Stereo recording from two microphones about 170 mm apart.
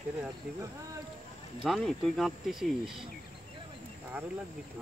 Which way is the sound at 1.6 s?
Centre (ahead or behind).